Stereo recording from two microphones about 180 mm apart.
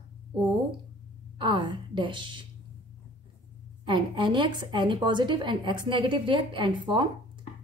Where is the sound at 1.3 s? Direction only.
25° right (ahead or behind).